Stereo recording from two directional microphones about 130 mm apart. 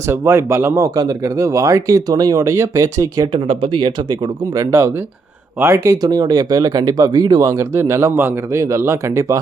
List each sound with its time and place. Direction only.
0.1 s speech: 20° right (ahead or behind)
3.3 s speech: 45° right (ahead or behind); by 9.4 s 20° right (ahead or behind)